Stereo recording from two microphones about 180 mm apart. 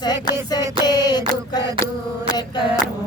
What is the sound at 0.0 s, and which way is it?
Music, 25° left (ahead or behind).